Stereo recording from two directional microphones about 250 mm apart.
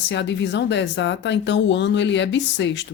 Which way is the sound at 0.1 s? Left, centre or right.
Left.